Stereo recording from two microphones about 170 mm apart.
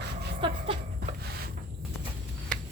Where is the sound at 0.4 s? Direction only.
30° right (ahead or behind).